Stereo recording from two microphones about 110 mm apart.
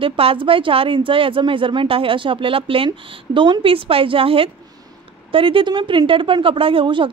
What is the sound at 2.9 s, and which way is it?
A woman's voice, 45° right (ahead or behind).